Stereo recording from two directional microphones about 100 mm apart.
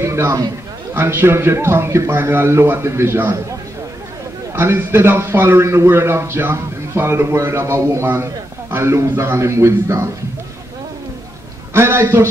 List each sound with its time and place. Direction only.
0.0 s a man's voice: 30° right (ahead or behind)
4.6 s a man's voice: 25° right (ahead or behind)
11.7 s a man's voice: 25° right (ahead or behind)